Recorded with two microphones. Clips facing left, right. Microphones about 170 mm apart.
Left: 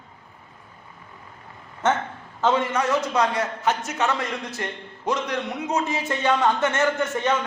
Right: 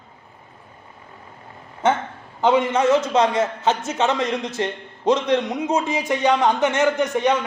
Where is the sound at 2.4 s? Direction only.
15° right (ahead or behind).